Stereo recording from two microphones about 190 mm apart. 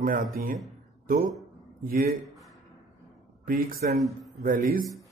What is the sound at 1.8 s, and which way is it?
Speech, 50° right (ahead or behind).